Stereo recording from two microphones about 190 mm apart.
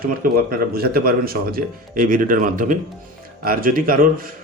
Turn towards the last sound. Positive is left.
turn(degrees=-45)  # may be behind; listen again after turning